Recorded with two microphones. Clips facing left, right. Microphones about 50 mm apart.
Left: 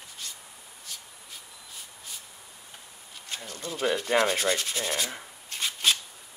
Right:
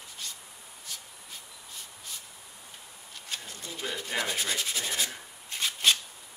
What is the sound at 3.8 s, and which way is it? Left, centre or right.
Rub, left.